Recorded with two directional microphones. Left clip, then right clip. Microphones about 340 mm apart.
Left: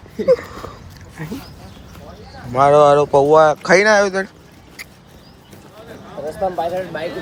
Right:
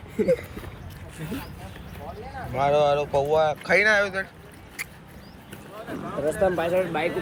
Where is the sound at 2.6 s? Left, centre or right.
Left.